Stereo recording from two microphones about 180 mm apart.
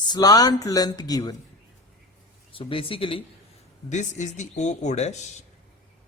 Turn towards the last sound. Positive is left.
turn(degrees=40)  # may be behind; listen again after turning